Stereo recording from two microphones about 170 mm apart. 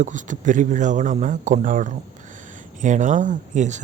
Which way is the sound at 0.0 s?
45° right (ahead or behind).